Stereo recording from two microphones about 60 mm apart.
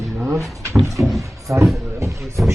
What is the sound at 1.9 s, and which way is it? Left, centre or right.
Speech, right.